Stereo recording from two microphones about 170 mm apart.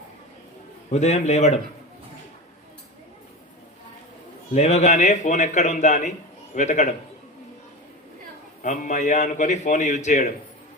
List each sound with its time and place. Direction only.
0.9 s a man's voice: 40° left (ahead or behind)
4.5 s a man's voice: 40° left (ahead or behind)
8.6 s a man's voice: 45° left (ahead or behind)